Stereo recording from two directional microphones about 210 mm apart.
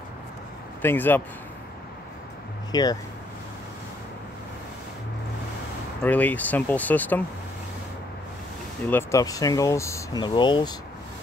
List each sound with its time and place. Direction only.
0.8 s speech: 10° left (ahead or behind)
2.7 s speech: 20° left (ahead or behind)
6.0 s speech: 5° left (ahead or behind)
8.8 s speech: 10° left (ahead or behind)